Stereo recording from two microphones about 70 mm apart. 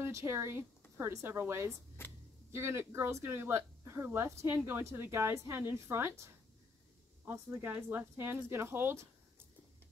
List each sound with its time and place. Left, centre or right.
0.0 s speech: right
7.5 s speech: right